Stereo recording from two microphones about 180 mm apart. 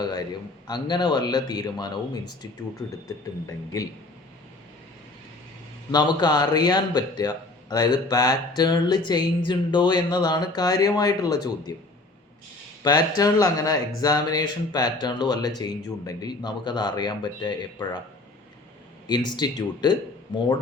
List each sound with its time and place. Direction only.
0.0 s a man's voice: 25° left (ahead or behind)
5.9 s a man's voice: 25° left (ahead or behind)
12.8 s a man's voice: 20° left (ahead or behind)
19.0 s a man's voice: 25° left (ahead or behind)